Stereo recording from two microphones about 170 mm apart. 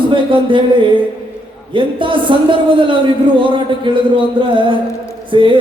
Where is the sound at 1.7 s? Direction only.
30° right (ahead or behind).